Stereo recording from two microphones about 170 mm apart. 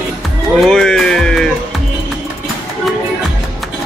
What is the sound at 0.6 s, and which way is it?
Music, centre (ahead or behind).